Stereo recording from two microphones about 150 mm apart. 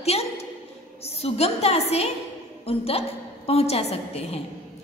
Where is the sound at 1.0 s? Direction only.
45° left (ahead or behind).